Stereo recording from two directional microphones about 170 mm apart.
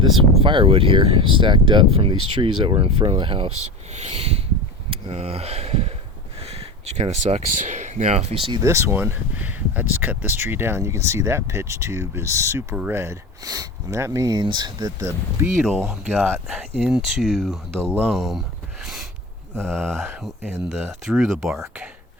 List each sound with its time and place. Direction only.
0.2 s speech: 30° right (ahead or behind)
8.6 s speech: 15° right (ahead or behind)
15.4 s speech: centre (ahead or behind)
18.1 s a sound: centre (ahead or behind)
19.5 s speech: 5° left (ahead or behind)